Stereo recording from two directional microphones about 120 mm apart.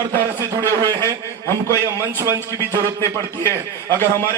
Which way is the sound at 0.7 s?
30° right (ahead or behind).